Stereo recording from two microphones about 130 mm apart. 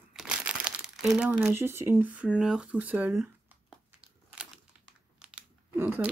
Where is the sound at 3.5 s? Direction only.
10° right (ahead or behind).